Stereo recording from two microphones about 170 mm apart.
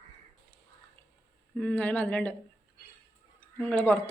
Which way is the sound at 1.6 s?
10° left (ahead or behind).